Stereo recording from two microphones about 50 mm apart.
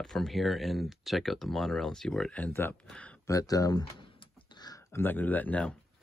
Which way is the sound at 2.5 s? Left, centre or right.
Left.